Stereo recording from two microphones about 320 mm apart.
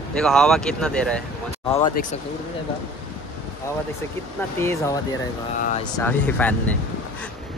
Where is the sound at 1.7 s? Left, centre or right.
Left.